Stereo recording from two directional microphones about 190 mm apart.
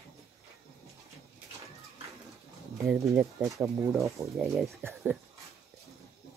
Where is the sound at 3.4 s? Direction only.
15° right (ahead or behind).